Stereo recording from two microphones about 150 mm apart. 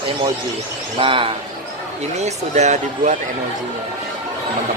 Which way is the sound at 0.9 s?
35° right (ahead or behind).